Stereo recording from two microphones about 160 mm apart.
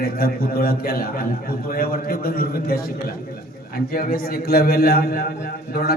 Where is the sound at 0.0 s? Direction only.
70° left (ahead or behind).